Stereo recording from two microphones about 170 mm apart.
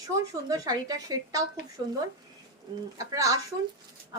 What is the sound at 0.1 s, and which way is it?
A woman's voice, 20° right (ahead or behind).